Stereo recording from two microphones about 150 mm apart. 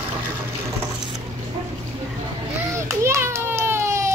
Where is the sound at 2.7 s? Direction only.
20° right (ahead or behind).